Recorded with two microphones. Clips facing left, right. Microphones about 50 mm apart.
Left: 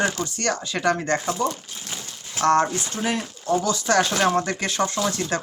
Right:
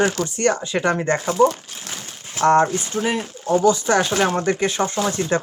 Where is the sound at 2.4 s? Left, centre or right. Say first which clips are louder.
Right 3 dB; centre.